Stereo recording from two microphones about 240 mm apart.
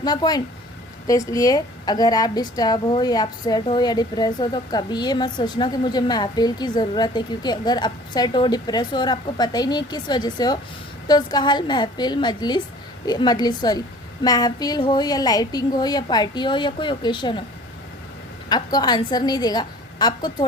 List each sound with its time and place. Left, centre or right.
0.0 s a woman's voice: centre
18.4 s a woman's voice: centre